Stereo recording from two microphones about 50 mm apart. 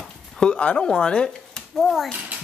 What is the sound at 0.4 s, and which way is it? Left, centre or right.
Speech, centre.